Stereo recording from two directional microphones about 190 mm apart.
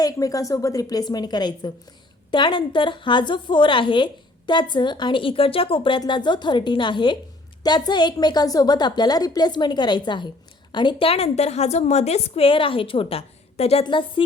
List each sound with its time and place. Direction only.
0.0 s a woman's voice: 20° left (ahead or behind)